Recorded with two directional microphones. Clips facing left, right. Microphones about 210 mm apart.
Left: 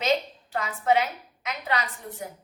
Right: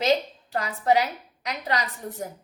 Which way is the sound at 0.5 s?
40° right (ahead or behind).